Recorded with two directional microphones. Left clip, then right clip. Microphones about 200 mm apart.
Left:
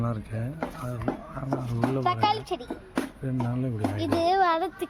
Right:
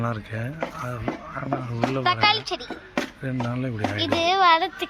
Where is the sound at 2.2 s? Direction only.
25° left (ahead or behind).